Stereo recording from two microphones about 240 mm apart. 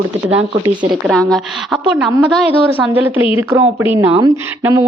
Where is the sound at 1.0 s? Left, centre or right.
Centre.